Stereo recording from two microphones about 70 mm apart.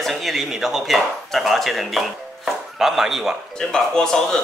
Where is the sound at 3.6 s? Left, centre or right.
Centre.